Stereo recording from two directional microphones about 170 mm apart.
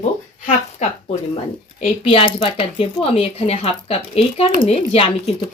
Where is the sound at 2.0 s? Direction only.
30° left (ahead or behind).